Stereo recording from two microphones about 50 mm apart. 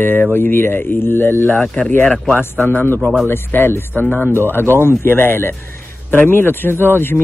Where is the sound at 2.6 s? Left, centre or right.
Left.